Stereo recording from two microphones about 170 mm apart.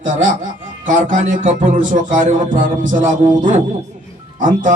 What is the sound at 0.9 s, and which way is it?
Music, 50° right (ahead or behind).